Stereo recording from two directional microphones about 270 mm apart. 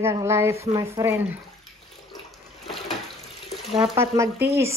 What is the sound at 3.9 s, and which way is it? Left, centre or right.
Speech, centre.